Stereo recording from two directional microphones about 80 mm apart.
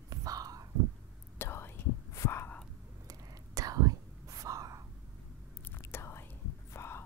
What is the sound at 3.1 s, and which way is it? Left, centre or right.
Whispering, right.